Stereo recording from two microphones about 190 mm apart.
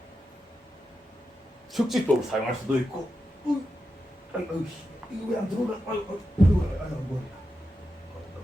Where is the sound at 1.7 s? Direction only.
Centre (ahead or behind).